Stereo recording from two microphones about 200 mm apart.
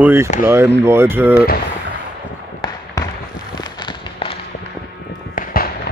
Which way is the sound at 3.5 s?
20° left (ahead or behind).